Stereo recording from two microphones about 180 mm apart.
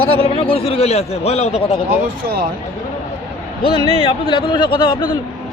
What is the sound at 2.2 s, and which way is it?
Speech, 55° right (ahead or behind).